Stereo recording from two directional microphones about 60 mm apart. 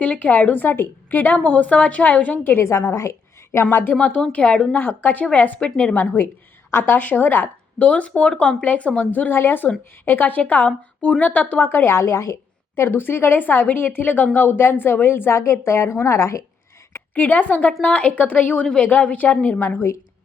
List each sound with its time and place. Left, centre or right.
0.0 s speech: left
2.4 s a woman's voice: left
2.6 s a woman's voice: left
3.9 s a woman's voice: centre
4.7 s speech: left
6.7 s a woman's voice: left
7.9 s a woman's voice: left
15.6 s speech: left
17.2 s speech: left
18.6 s a woman's voice: centre
18.9 s speech: left